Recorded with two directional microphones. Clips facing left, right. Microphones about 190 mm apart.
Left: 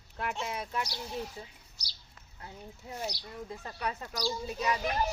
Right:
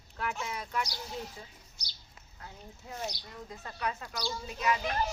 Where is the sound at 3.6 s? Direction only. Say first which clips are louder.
Right 2 dB; 30° left (ahead or behind).